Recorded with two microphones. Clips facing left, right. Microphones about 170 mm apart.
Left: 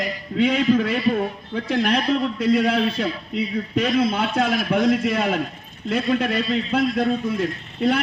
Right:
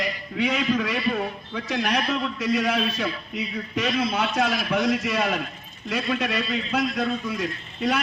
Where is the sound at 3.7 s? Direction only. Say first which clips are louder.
Left 4 dB; 50° left (ahead or behind).